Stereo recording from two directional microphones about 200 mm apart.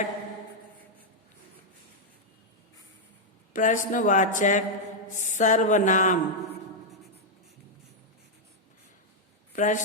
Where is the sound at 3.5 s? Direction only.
40° left (ahead or behind).